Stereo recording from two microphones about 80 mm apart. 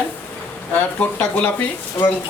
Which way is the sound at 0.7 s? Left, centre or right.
Left.